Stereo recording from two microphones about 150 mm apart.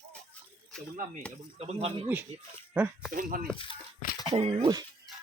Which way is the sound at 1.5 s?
40° right (ahead or behind).